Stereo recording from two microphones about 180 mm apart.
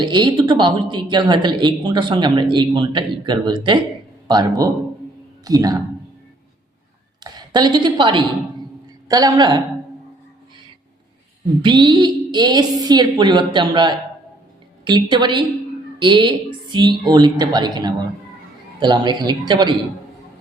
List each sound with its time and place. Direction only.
0.0 s a woman's voice: 25° right (ahead or behind)
7.3 s a woman's voice: 25° right (ahead or behind)
11.6 s a woman's voice: 25° right (ahead or behind)